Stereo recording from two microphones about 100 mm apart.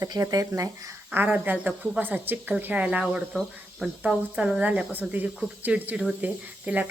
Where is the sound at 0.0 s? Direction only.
35° right (ahead or behind).